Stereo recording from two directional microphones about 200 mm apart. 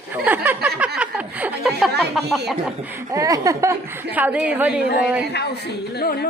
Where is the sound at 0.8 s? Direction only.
5° right (ahead or behind).